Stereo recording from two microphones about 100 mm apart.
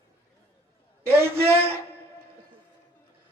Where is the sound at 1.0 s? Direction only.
25° right (ahead or behind).